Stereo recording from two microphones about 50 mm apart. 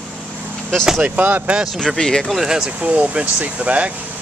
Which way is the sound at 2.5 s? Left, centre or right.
Centre.